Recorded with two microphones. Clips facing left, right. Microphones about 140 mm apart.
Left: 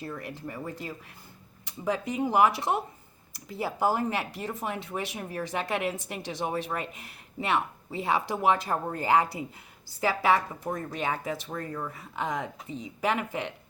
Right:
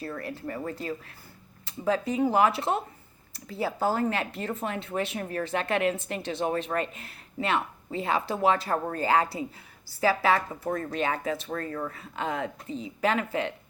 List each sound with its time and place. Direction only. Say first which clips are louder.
0.0 s speech: right 2 dB; 15° left (ahead or behind)